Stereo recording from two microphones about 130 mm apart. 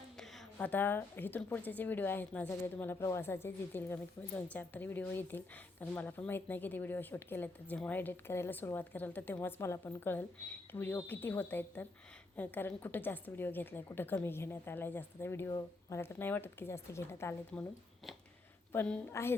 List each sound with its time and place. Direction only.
0.2 s a woman's voice: 10° left (ahead or behind)
18.7 s a woman's voice: 15° left (ahead or behind)